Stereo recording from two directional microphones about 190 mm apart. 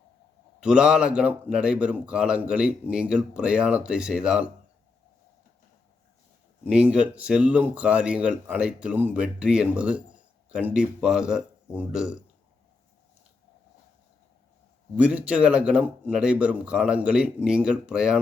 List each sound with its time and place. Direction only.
0.6 s speech: 5° right (ahead or behind)
6.7 s speech: 5° right (ahead or behind)
14.9 s speech: 5° right (ahead or behind)